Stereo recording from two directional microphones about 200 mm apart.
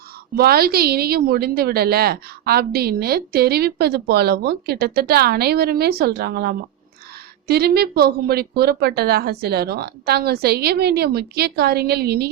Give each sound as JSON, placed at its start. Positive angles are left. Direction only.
{"t": 0.3, "sound": "a woman's voice", "side_deg": -50}